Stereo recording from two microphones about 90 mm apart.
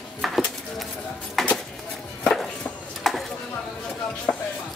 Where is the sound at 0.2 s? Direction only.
Centre (ahead or behind).